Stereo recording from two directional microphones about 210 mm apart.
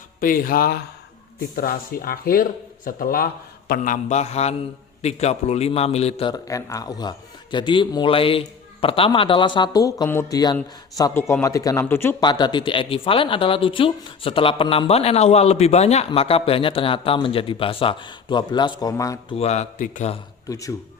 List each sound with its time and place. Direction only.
0.2 s speech: 40° left (ahead or behind)
3.7 s mantra: 40° left (ahead or behind)
5.0 s a man's voice: 30° left (ahead or behind); by 19.4 s 15° left (ahead or behind)
19.4 s mantra: 30° left (ahead or behind)
20.5 s speech: 15° left (ahead or behind)